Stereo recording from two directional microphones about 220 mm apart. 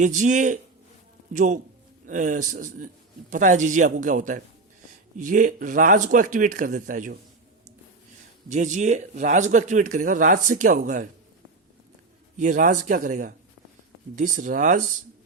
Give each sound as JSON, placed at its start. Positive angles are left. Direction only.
{"t": 0.0, "sound": "speech", "side_deg": -35}
{"t": 8.4, "sound": "speech", "side_deg": -35}
{"t": 12.4, "sound": "speech", "side_deg": -35}